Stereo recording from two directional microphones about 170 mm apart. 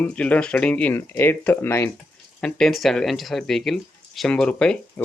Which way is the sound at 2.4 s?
Centre (ahead or behind).